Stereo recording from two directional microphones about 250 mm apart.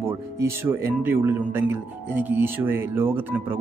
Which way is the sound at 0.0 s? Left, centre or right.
Centre.